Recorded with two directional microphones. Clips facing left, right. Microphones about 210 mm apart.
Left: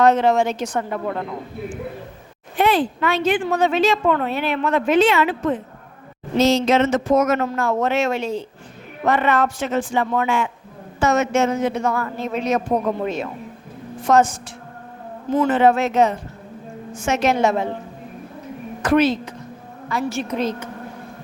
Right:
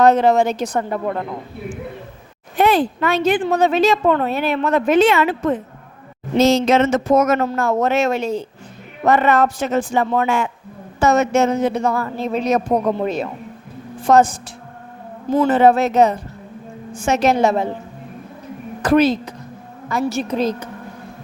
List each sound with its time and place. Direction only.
0.0 s a woman's voice: 35° right (ahead or behind)
2.6 s a woman's voice: 40° right (ahead or behind)
18.8 s a woman's voice: 35° right (ahead or behind)